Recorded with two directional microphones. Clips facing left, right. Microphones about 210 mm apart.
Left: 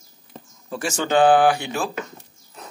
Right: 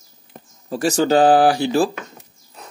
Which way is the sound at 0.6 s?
35° right (ahead or behind).